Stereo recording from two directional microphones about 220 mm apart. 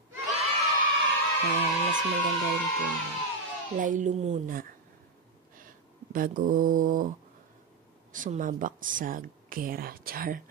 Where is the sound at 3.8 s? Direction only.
35° right (ahead or behind).